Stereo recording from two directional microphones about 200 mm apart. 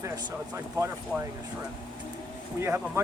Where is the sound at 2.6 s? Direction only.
10° right (ahead or behind).